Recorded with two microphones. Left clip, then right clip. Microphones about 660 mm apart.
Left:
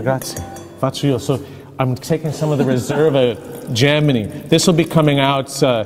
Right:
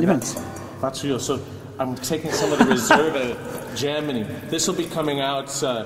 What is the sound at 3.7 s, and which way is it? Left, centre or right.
Speech, left.